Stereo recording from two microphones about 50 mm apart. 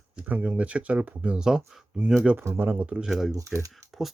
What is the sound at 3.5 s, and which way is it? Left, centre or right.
Speech, centre.